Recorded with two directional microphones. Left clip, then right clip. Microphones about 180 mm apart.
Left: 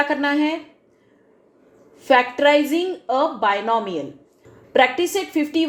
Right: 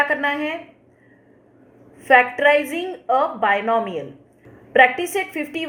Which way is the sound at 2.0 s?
50° left (ahead or behind).